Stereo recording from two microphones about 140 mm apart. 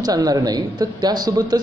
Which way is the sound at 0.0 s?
25° right (ahead or behind).